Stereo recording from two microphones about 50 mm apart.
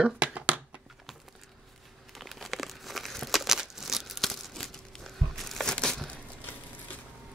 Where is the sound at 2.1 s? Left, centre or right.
Centre.